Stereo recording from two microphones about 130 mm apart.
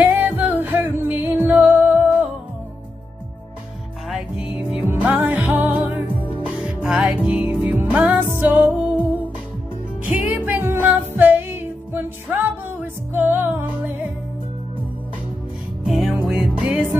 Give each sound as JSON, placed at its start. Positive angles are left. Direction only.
{"t": 0.0, "sound": "music", "side_deg": -10}
{"t": 4.1, "sound": "music", "side_deg": -5}
{"t": 10.0, "sound": "music", "side_deg": -10}
{"t": 15.8, "sound": "music", "side_deg": 0}